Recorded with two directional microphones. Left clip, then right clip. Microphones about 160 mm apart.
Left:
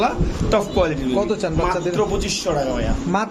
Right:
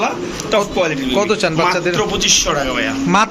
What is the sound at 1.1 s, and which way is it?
Speech, 5° right (ahead or behind).